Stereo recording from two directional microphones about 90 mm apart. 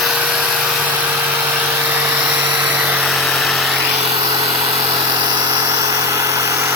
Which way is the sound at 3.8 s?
15° right (ahead or behind).